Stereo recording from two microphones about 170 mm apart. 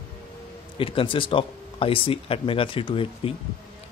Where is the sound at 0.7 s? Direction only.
30° left (ahead or behind).